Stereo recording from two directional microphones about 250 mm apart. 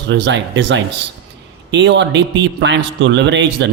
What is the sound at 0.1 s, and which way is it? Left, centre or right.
A man's voice, right.